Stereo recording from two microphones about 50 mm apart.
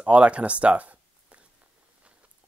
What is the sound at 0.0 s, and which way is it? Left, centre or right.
Speech, right.